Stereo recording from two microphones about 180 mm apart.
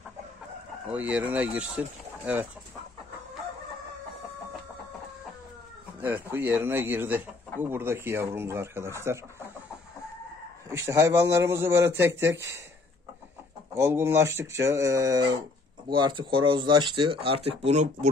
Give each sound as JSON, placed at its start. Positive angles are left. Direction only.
{"t": 0.8, "sound": "speech", "side_deg": -5}
{"t": 5.9, "sound": "speech", "side_deg": -10}
{"t": 10.7, "sound": "speech", "side_deg": -15}
{"t": 13.7, "sound": "speech", "side_deg": -15}